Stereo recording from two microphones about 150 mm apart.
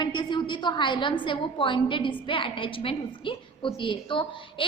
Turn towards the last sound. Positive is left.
turn(degrees=35)  # may be behind; listen again after turning